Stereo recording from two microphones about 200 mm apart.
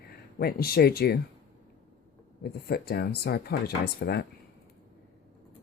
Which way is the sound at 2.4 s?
50° left (ahead or behind).